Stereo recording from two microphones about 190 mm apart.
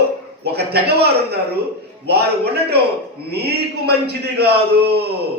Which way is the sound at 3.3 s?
55° right (ahead or behind).